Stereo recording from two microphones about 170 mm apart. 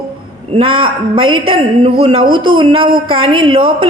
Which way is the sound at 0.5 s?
35° right (ahead or behind).